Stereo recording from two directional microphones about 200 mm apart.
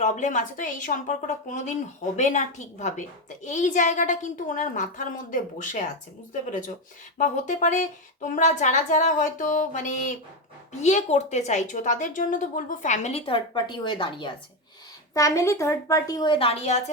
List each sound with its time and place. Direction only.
0.0 s a woman's voice: 35° left (ahead or behind)
7.2 s a woman's voice: 35° left (ahead or behind)